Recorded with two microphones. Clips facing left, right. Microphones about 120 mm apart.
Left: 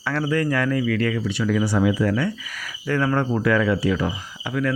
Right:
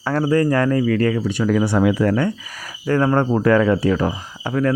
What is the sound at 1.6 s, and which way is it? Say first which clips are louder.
Speech: right 2 dB; 60° right (ahead or behind).